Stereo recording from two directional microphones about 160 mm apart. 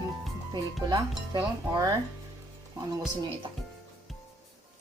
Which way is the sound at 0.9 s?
20° right (ahead or behind).